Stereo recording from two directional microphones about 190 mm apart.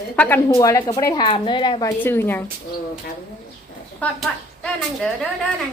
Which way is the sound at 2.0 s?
10° left (ahead or behind).